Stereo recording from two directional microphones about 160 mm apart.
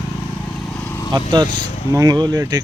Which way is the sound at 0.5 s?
5° left (ahead or behind).